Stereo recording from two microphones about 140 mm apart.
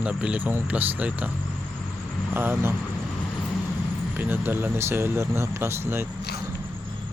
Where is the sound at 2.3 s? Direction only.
15° right (ahead or behind).